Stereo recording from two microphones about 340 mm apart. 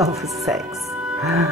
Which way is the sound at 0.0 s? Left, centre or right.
Centre.